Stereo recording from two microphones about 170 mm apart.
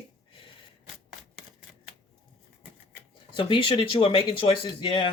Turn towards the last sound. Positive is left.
turn(degrees=30)  # may be behind; listen again after turning